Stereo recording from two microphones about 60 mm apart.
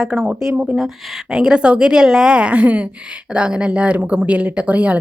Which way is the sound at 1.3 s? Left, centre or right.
Centre.